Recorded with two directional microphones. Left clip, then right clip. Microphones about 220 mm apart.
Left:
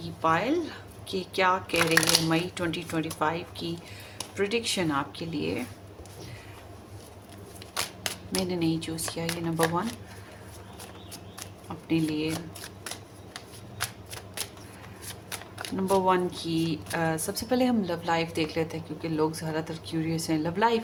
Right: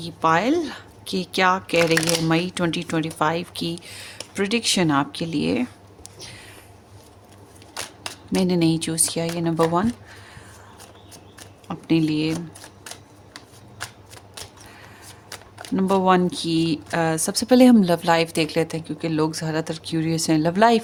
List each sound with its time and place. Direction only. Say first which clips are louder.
0.0 s speech: right 6 dB; 55° right (ahead or behind)
2.0 s speech: right 1 dB; 5° right (ahead or behind)
2.3 s speech: right 6 dB; 55° right (ahead or behind)
8.4 s speech: right 9 dB; 50° right (ahead or behind)
11.7 s speech: right 7 dB; 45° right (ahead or behind)
15.3 s shuffling cards: even; centre (ahead or behind)
15.7 s speech: right 6 dB; 45° right (ahead or behind)